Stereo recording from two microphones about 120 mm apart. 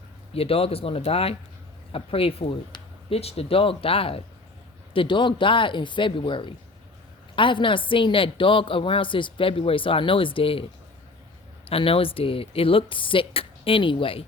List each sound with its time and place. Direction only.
0.3 s a woman's voice: 50° left (ahead or behind)
11.7 s a woman's voice: 50° left (ahead or behind)